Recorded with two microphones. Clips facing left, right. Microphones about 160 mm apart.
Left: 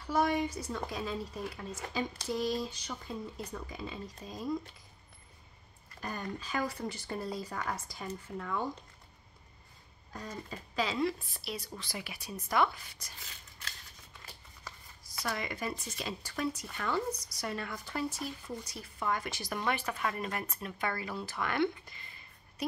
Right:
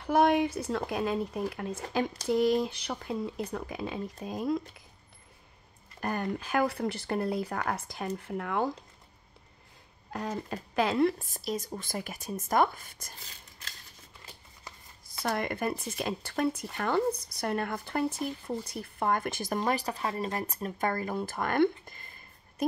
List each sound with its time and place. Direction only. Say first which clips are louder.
0.0 s speech: right 6 dB; 65° right (ahead or behind)
5.9 s speech: right 7 dB; 60° right (ahead or behind)
10.3 s speech: right 5 dB; 55° right (ahead or behind)
15.0 s speech: right 6 dB; 55° right (ahead or behind)